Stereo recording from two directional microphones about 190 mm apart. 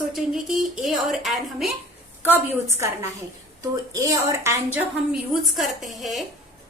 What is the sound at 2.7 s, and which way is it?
A woman's voice, 15° right (ahead or behind).